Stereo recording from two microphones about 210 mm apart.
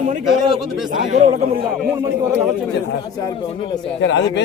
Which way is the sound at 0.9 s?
35° right (ahead or behind).